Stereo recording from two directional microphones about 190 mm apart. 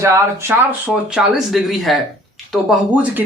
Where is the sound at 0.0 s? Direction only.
15° right (ahead or behind).